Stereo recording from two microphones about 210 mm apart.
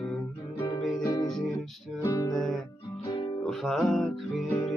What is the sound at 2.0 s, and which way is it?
Music, 15° left (ahead or behind).